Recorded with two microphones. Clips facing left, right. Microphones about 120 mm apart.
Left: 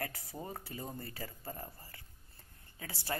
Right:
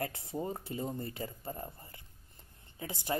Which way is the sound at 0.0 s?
25° right (ahead or behind).